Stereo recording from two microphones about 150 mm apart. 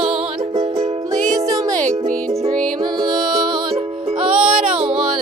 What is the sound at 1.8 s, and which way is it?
Music, 45° right (ahead or behind).